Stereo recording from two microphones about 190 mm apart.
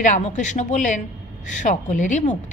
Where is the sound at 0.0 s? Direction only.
40° left (ahead or behind).